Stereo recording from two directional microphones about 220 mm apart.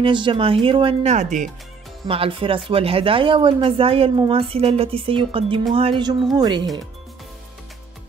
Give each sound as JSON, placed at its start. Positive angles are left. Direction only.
{"t": 0.0, "sound": "speech", "side_deg": -20}